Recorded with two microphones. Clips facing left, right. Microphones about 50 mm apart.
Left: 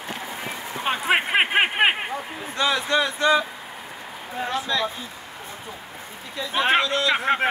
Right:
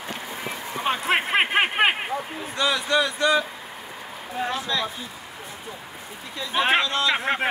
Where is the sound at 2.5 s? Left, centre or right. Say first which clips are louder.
Left 1 dB; left.